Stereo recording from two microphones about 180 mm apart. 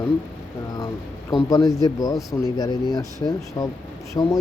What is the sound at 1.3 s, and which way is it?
Speech, 25° left (ahead or behind).